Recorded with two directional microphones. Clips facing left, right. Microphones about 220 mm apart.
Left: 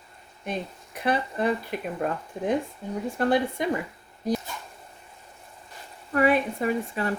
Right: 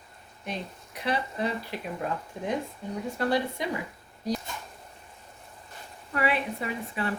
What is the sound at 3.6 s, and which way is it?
Speech, 50° left (ahead or behind).